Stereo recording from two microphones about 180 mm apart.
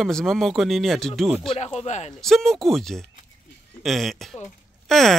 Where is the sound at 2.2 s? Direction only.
Centre (ahead or behind).